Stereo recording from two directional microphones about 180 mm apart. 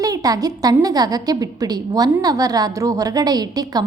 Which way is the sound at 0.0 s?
20° right (ahead or behind).